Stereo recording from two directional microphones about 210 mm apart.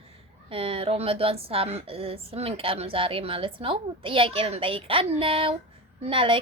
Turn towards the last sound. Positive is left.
turn(degrees=-25)  # may be behind; listen again after turning